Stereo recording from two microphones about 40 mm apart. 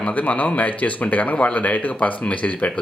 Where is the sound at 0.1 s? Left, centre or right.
Left.